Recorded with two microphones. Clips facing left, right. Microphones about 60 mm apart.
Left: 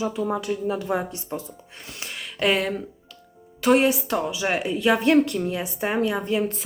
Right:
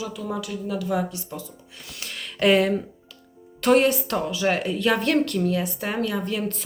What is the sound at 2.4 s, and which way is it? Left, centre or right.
A woman's voice, centre.